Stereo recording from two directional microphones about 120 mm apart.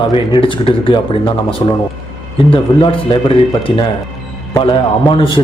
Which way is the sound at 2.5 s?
45° left (ahead or behind).